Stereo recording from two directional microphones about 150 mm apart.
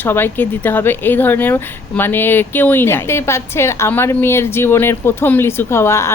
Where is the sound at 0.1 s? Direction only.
15° left (ahead or behind).